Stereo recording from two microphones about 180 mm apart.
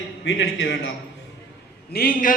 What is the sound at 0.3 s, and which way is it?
Speech, 90° left.